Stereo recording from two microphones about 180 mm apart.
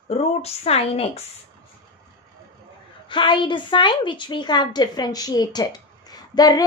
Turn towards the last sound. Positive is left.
turn(degrees=20)  # may be behind; listen again after turning